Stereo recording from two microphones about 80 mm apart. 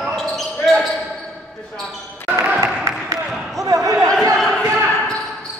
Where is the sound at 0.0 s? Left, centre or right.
Centre.